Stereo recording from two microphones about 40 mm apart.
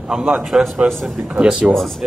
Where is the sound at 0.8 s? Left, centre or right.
Right.